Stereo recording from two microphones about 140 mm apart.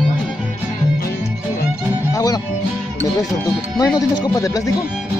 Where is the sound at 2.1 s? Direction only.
25° left (ahead or behind).